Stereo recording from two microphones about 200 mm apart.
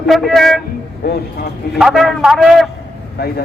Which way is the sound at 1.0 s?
50° left (ahead or behind).